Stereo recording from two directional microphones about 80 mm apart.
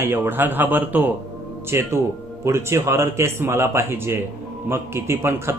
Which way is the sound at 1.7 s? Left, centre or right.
Right.